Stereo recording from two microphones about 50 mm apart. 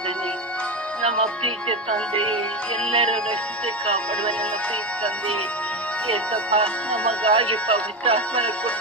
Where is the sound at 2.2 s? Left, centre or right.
Left.